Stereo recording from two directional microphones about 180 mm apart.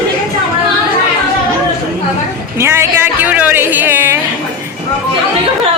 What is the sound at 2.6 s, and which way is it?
Music, 15° right (ahead or behind).